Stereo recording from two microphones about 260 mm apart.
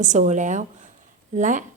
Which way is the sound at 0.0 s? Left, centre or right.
Right.